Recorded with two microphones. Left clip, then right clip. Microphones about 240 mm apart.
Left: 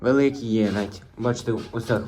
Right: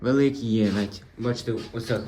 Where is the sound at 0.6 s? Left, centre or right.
Centre.